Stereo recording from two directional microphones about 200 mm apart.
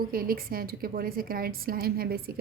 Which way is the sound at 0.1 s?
45° right (ahead or behind).